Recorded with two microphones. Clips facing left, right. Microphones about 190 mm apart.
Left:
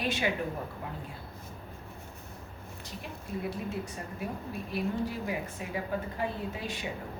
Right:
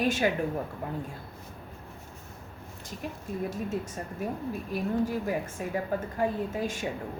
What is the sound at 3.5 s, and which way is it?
A woman's voice, 45° right (ahead or behind).